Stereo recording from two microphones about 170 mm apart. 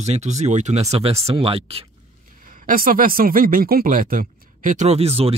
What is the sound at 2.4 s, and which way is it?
Speech, 55° right (ahead or behind).